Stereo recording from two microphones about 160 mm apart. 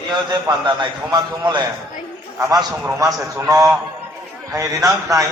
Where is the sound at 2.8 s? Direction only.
20° right (ahead or behind).